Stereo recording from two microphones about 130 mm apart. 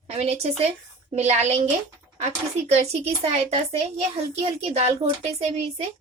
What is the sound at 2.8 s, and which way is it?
A child's voice, 55° right (ahead or behind).